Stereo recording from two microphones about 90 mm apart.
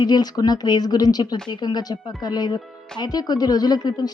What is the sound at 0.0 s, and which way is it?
Speech, 50° left (ahead or behind).